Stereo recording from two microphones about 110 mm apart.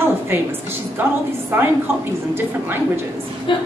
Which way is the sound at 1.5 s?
15° right (ahead or behind).